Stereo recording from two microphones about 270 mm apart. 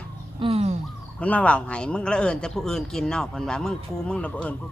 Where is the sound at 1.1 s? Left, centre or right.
Centre.